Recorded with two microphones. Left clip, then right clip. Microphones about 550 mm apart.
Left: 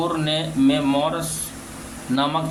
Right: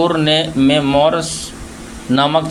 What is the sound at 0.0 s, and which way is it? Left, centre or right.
Speech, left.